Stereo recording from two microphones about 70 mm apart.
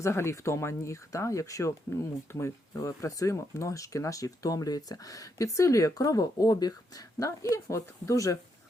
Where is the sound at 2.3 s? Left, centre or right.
Left.